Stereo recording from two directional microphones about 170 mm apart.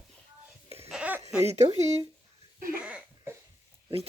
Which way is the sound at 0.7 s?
35° right (ahead or behind).